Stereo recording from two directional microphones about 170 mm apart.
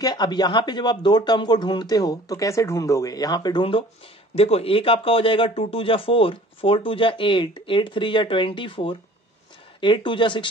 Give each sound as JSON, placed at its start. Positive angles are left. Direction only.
{"t": 0.0, "sound": "a man's voice", "side_deg": 25}